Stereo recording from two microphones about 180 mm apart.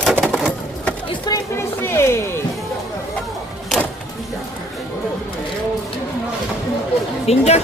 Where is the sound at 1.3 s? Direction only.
20° left (ahead or behind).